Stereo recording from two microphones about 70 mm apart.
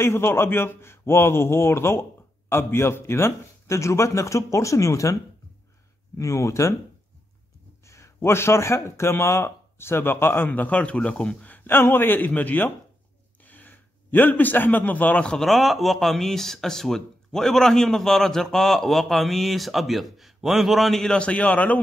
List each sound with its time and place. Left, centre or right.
0.0 s a man's voice: left
7.8 s a man's voice: left; by 11.5 s centre
11.5 s a man's voice: left
15.3 s speech: centre
21.2 s speech: centre